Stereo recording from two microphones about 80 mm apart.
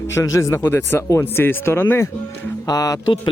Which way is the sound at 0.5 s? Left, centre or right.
Left.